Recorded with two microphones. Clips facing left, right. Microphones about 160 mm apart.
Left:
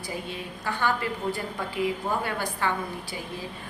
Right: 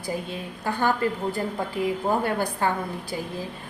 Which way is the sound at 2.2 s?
50° right (ahead or behind).